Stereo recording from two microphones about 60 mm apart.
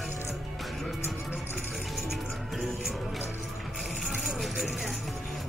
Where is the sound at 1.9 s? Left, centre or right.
Centre.